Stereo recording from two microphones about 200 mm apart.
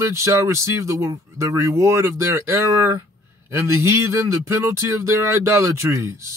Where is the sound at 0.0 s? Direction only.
15° right (ahead or behind).